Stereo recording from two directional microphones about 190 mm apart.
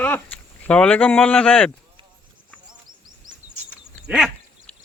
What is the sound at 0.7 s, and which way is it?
Speech, 5° left (ahead or behind).